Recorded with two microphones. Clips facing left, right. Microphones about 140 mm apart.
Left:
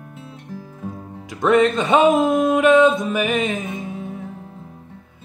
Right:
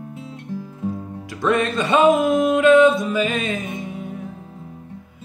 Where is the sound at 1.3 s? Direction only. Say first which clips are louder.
Left 4 dB; 20° left (ahead or behind).